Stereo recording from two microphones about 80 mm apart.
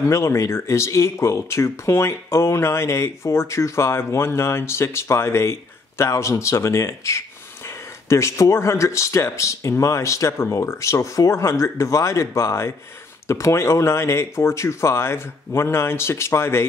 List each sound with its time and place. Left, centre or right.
0.1 s speech: left